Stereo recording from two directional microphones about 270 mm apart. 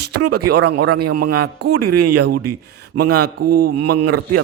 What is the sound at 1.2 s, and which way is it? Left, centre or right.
Speech, right.